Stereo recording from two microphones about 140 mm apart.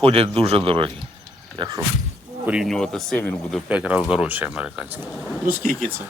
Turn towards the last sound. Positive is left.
turn(degrees=-75)  # may be behind; listen again after turning